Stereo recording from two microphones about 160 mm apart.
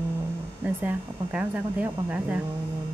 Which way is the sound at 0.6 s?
10° right (ahead or behind).